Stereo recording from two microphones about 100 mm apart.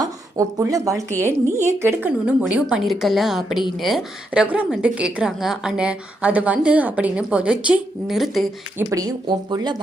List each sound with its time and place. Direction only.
0.7 s a woman's voice: 30° right (ahead or behind); by 4.4 s centre (ahead or behind)
4.4 s a woman's voice: 15° right (ahead or behind)
8.9 s speech: 40° right (ahead or behind)